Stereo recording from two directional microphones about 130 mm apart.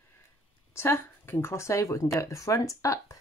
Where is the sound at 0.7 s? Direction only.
20° left (ahead or behind).